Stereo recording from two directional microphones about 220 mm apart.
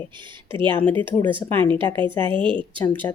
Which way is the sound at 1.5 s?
5° left (ahead or behind).